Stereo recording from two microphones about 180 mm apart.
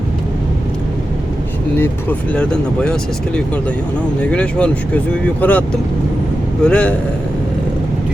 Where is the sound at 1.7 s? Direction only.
10° left (ahead or behind).